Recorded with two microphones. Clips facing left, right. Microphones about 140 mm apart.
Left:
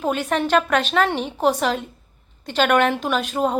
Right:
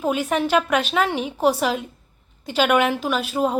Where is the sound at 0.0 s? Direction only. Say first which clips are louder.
Even; 5° right (ahead or behind).